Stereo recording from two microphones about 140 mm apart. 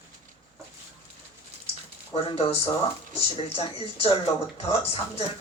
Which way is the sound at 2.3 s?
45° left (ahead or behind).